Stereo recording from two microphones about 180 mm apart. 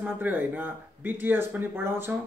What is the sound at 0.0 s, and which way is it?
Speech, 10° right (ahead or behind).